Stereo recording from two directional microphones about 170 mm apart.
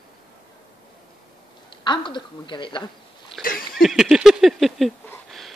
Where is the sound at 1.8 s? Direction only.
25° left (ahead or behind).